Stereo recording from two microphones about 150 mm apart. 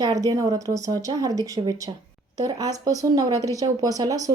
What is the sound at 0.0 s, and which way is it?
A woman's voice, 25° right (ahead or behind).